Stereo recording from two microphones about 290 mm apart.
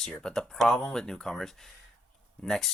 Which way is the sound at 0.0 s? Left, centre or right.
Centre.